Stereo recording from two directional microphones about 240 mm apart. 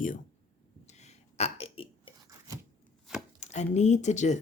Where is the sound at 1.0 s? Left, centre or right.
Left.